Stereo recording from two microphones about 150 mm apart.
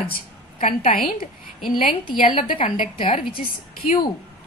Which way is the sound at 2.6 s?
65° left (ahead or behind).